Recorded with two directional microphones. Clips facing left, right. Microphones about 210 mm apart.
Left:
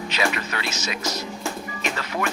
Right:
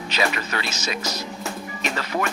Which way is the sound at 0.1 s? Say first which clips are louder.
Right 2 dB; 35° right (ahead or behind).